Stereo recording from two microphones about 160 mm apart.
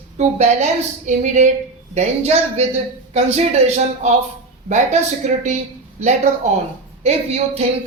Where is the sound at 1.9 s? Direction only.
40° right (ahead or behind).